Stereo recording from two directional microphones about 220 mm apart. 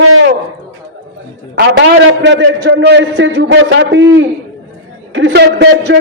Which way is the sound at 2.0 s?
55° right (ahead or behind).